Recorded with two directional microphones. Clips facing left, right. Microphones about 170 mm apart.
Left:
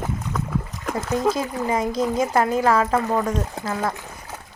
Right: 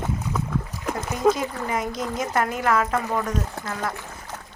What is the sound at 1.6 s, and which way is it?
A woman's voice, 30° left (ahead or behind).